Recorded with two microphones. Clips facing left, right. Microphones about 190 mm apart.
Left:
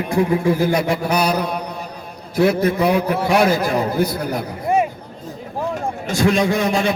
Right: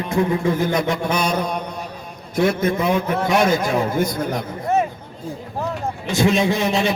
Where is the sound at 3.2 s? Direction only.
5° left (ahead or behind).